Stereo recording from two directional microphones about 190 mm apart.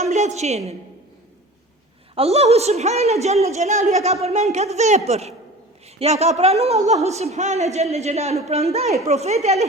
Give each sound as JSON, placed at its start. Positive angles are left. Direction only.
{"t": 0.0, "sound": "a woman's voice", "side_deg": -35}
{"t": 2.1, "sound": "a woman's voice", "side_deg": -30}